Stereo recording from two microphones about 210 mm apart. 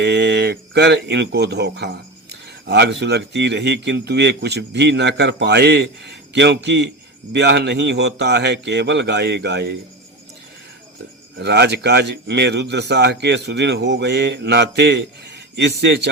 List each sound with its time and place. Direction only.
0.0 s speech: 55° right (ahead or behind)
11.3 s speech: 55° right (ahead or behind)